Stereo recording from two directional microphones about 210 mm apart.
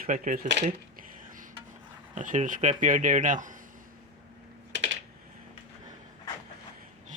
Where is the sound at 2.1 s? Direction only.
35° right (ahead or behind).